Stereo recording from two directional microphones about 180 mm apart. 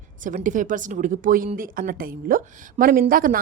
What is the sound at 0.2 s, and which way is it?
A woman's voice, 45° right (ahead or behind).